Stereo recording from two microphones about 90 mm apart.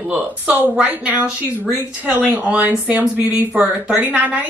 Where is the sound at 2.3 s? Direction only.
15° right (ahead or behind).